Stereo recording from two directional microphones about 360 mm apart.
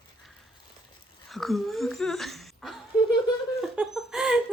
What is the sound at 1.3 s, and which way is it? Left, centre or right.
Speech, centre.